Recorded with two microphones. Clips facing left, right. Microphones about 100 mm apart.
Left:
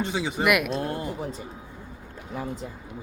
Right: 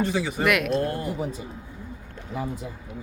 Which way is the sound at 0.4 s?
5° left (ahead or behind).